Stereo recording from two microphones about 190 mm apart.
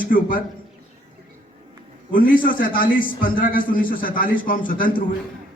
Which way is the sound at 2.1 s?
45° left (ahead or behind).